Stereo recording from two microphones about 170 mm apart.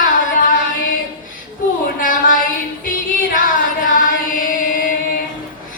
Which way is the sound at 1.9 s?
55° left (ahead or behind).